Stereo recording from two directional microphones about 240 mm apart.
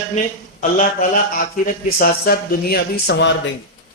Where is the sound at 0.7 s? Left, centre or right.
Left.